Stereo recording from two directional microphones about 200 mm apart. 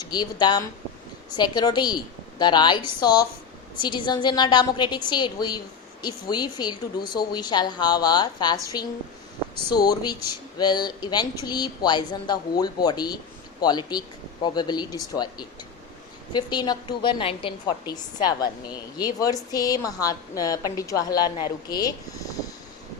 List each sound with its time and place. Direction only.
0.1 s a woman's voice: 20° left (ahead or behind)